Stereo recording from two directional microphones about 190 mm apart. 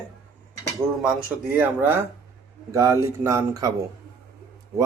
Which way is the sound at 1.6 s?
10° right (ahead or behind).